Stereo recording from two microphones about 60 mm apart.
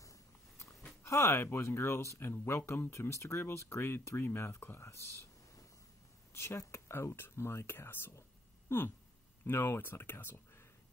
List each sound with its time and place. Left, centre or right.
1.0 s speech: left
6.3 s speech: left
8.6 s a sound: left
9.5 s speech: left